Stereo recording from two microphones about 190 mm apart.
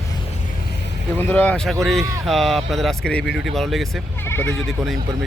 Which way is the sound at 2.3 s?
Centre (ahead or behind).